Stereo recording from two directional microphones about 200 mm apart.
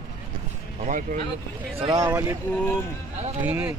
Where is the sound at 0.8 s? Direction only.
40° right (ahead or behind).